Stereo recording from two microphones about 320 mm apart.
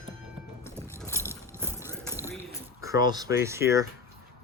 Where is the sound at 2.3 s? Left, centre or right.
Centre.